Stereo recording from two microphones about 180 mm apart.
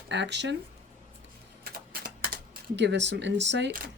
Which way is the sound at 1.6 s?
55° right (ahead or behind).